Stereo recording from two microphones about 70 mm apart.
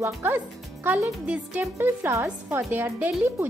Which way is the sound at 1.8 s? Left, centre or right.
Right.